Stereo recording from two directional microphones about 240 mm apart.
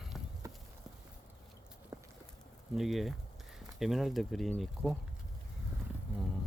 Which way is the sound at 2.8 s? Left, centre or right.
Centre.